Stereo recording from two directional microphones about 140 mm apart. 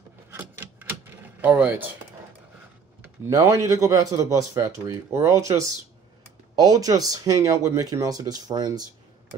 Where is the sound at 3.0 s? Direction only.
20° right (ahead or behind).